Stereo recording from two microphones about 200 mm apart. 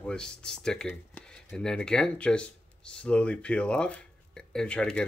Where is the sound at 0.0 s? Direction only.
5° left (ahead or behind).